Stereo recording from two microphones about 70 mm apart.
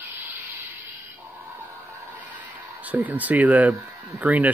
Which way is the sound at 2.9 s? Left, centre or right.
Right.